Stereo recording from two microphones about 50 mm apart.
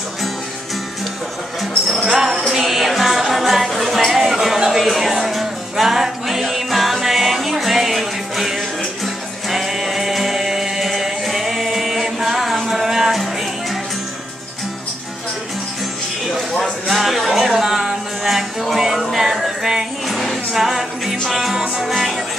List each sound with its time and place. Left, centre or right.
1.9 s music: centre
16.8 s music: centre